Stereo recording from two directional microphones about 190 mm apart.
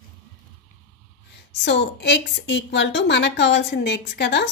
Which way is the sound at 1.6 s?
65° left (ahead or behind).